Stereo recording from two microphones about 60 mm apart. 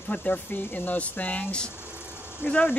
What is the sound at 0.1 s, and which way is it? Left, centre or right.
Speech, left.